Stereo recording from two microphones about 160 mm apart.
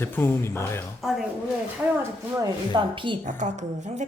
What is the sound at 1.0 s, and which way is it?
Music, centre (ahead or behind).